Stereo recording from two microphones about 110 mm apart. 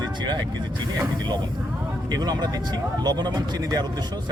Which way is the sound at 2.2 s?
40° right (ahead or behind).